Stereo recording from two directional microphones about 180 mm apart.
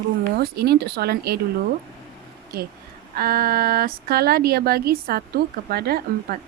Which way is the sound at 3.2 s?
55° right (ahead or behind).